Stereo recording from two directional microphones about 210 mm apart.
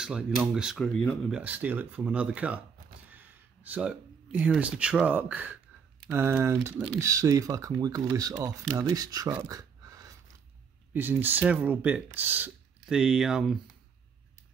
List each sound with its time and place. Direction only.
0.0 s speech: 5° right (ahead or behind)
9.3 s a sound: 15° right (ahead or behind)
10.9 s speech: 10° right (ahead or behind)